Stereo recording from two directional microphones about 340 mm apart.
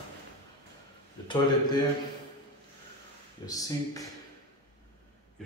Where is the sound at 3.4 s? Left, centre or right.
Centre.